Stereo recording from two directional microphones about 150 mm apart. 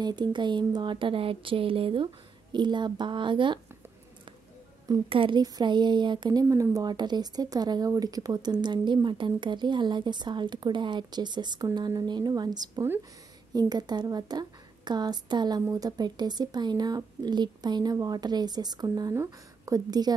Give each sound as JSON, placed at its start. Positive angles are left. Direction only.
{"t": 0.0, "sound": "speech", "side_deg": -30}
{"t": 5.1, "sound": "speech", "side_deg": -35}
{"t": 6.4, "sound": "speech", "side_deg": -20}